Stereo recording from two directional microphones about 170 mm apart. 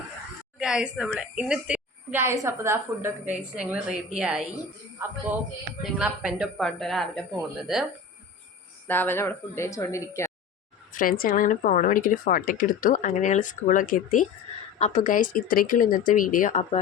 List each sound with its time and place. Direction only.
0.6 s a woman's voice: 5° right (ahead or behind)
8.9 s speech: 10° left (ahead or behind)
10.9 s a woman's voice: 55° left (ahead or behind)
14.8 s a woman's voice: 40° left (ahead or behind)